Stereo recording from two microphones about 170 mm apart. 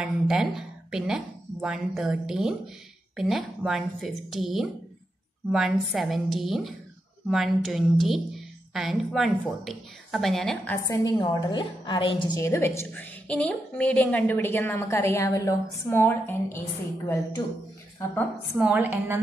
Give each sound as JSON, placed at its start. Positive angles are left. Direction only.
{"t": 0.0, "sound": "a woman's voice", "side_deg": -5}
{"t": 10.8, "sound": "a woman's voice", "side_deg": 20}
{"t": 12.4, "sound": "a woman's voice", "side_deg": 15}
{"t": 17.4, "sound": "a woman's voice", "side_deg": 25}
{"t": 18.6, "sound": "a woman's voice", "side_deg": -10}